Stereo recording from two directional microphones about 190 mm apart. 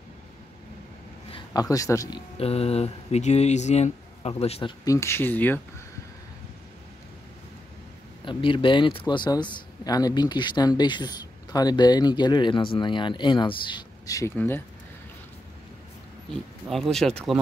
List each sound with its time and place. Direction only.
1.3 s a man's voice: 20° left (ahead or behind)
2.3 s speech: 30° left (ahead or behind)
4.8 s speech: 15° left (ahead or behind)
8.3 s speech: 25° left (ahead or behind)
16.6 s speech: centre (ahead or behind)